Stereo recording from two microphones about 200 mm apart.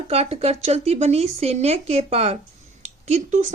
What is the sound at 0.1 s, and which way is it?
Speech, 30° right (ahead or behind).